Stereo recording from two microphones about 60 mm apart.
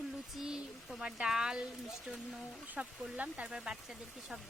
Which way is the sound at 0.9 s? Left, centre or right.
Centre.